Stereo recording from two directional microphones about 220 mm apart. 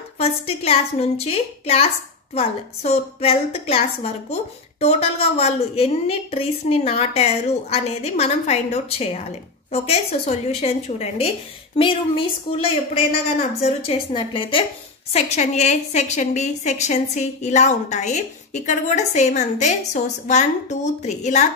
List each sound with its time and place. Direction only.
0.2 s a woman's voice: 25° left (ahead or behind)